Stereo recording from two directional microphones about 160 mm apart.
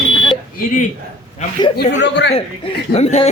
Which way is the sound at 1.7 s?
85° left.